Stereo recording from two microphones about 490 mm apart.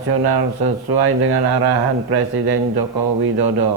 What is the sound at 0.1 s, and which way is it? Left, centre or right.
Speech, right.